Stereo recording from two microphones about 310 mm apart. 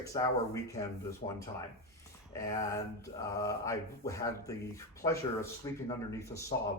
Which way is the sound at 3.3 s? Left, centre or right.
Centre.